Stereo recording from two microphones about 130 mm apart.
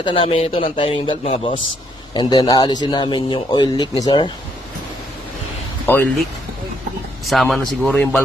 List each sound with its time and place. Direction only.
0.0 s speech: 40° left (ahead or behind)
2.1 s a man's voice: 35° left (ahead or behind)
5.8 s speech: 15° left (ahead or behind)
7.3 s speech: centre (ahead or behind)
7.9 s speech: 15° left (ahead or behind)